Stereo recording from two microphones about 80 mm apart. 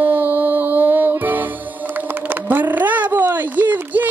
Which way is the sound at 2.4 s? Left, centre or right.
Right.